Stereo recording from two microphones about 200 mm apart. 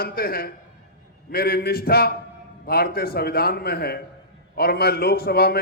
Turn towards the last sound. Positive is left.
turn(degrees=50)  # may be behind; listen again after turning